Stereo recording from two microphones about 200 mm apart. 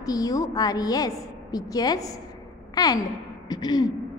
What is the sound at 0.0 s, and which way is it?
A woman's voice, 20° left (ahead or behind).